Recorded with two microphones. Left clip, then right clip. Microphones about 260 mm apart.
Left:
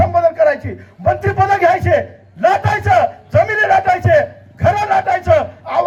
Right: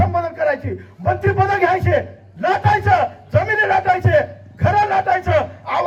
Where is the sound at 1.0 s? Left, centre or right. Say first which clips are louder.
Left 3 dB; left.